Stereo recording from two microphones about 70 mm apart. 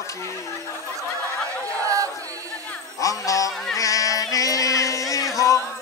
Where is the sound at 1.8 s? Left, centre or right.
Right.